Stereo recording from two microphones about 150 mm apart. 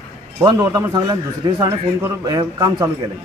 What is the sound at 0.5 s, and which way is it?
Speech, 25° right (ahead or behind).